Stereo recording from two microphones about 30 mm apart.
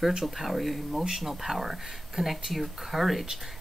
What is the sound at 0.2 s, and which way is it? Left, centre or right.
Speech, centre.